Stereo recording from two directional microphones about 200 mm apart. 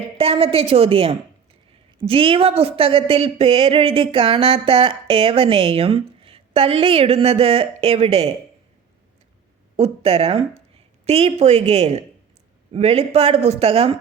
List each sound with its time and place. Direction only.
0.2 s speech: 30° right (ahead or behind)
9.7 s speech: 30° right (ahead or behind)